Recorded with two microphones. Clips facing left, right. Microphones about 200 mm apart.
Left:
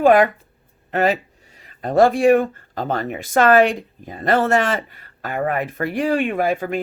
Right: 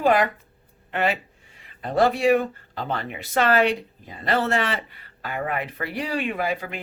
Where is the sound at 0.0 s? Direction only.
50° left (ahead or behind).